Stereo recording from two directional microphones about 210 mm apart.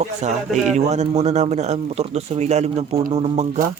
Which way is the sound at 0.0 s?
35° right (ahead or behind).